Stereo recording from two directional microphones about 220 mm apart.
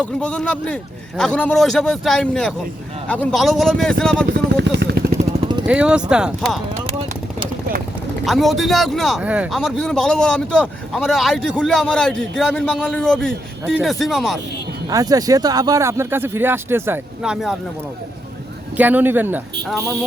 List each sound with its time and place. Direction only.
0.0 s speech: 5° left (ahead or behind)
4.6 s vehicle: 50° right (ahead or behind)
5.6 s speech: 5° right (ahead or behind)
6.8 s vehicle: 25° right (ahead or behind)
8.2 s speech: centre (ahead or behind)
14.8 s speech: 15° right (ahead or behind)
18.8 s speech: 5° right (ahead or behind)